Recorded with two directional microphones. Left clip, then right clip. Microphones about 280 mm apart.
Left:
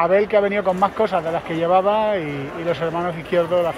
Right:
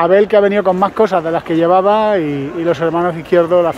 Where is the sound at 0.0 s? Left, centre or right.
Right.